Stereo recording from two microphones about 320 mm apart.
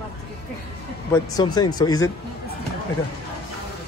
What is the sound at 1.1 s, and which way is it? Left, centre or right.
Speech, centre.